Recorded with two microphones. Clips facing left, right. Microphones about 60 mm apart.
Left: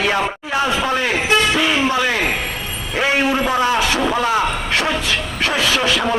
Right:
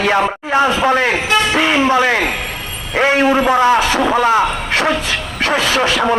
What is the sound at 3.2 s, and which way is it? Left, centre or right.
Speech, right.